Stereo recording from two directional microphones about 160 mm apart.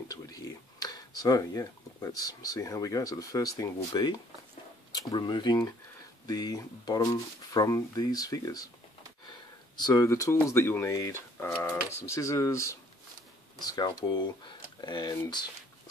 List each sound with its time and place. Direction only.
0.1 s speech: 20° left (ahead or behind)
9.8 s speech: 25° left (ahead or behind)